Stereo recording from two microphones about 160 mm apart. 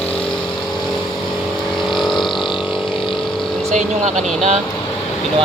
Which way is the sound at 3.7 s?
50° right (ahead or behind).